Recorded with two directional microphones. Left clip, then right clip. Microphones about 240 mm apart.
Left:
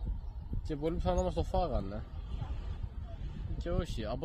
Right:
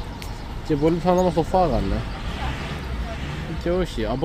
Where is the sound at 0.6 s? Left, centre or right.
Left.